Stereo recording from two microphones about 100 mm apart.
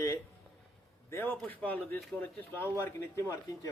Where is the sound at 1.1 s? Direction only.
25° left (ahead or behind).